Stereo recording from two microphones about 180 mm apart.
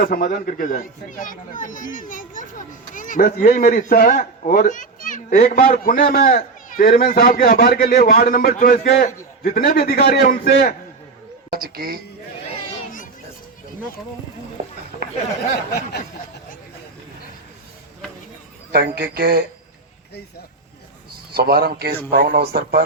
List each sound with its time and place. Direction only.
0.0 s speech: 55° left (ahead or behind)
7.9 s speech: 50° left (ahead or behind)
11.5 s speech: 55° right (ahead or behind)
18.7 s speech: 60° right (ahead or behind)
21.3 s speech: 60° right (ahead or behind)